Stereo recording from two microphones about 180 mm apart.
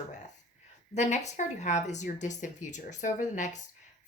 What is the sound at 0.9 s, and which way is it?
A woman's voice, 40° left (ahead or behind).